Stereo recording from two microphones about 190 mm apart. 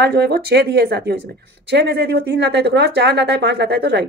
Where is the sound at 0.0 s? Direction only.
55° right (ahead or behind).